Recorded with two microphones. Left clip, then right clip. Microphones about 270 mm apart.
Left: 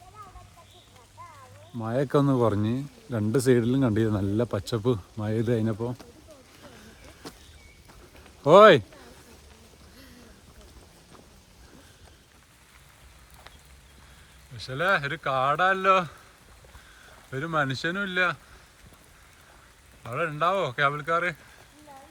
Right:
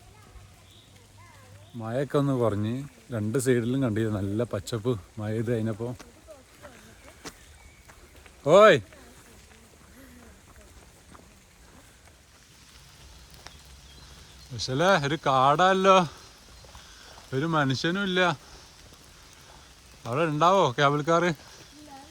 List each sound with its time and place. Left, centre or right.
1.8 s speech: centre
8.4 s speech: centre
14.5 s speech: centre
17.3 s speech: centre
20.0 s speech: centre